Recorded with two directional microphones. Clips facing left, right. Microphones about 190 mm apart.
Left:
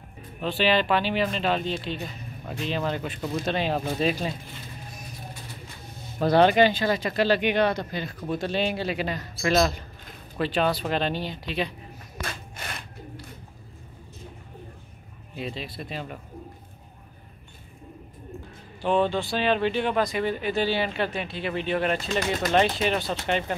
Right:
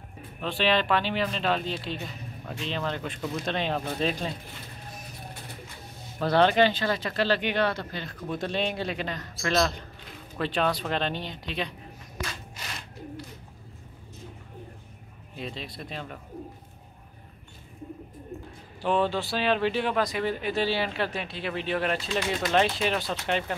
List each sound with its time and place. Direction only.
0.4 s speech: 5° left (ahead or behind)
6.1 s speech: 15° left (ahead or behind)
12.2 s rub: 55° left (ahead or behind)
15.3 s speech: 5° left (ahead or behind)
18.8 s speech: centre (ahead or behind)